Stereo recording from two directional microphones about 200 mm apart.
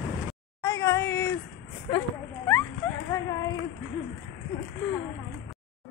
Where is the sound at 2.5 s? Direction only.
15° left (ahead or behind).